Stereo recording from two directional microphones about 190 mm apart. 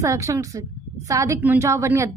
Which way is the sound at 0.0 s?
15° right (ahead or behind).